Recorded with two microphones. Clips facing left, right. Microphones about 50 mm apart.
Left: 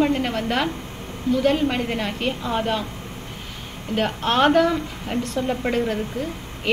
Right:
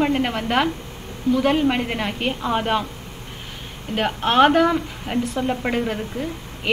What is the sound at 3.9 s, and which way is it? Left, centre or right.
A woman's voice, centre.